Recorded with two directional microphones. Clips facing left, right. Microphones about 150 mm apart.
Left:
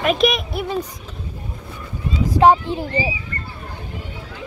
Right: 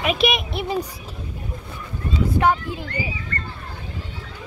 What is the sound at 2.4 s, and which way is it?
Speech, 30° left (ahead or behind).